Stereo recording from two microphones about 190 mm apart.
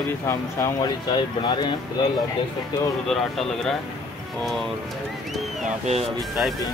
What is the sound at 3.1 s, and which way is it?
Speech, centre (ahead or behind).